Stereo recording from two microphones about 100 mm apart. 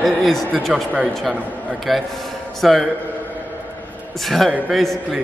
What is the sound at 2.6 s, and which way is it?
Speech, centre (ahead or behind).